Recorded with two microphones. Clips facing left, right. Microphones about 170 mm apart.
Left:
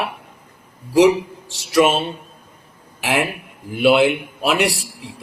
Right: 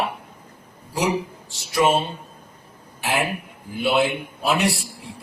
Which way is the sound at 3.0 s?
90° left.